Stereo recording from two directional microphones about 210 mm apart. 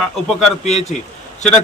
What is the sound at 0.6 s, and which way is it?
Speech, 30° left (ahead or behind).